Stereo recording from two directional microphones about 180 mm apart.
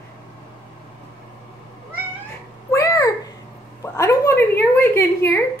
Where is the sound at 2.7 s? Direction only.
15° left (ahead or behind).